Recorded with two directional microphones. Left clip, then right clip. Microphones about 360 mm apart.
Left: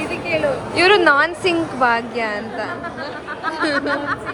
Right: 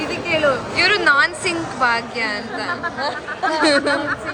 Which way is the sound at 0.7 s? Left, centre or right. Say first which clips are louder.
Left 3 dB; centre.